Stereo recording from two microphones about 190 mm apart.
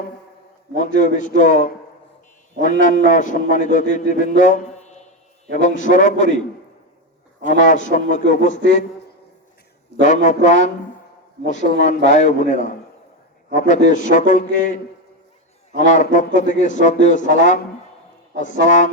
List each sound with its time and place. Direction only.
0.8 s a man's voice: 40° left (ahead or behind)
7.6 s a man's voice: 40° left (ahead or behind)
10.0 s a man's voice: 40° left (ahead or behind)
15.8 s a man's voice: 40° left (ahead or behind)
18.6 s a man's voice: 40° left (ahead or behind)